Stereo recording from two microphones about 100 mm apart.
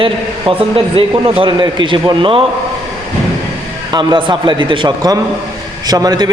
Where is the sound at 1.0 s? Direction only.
75° right (ahead or behind).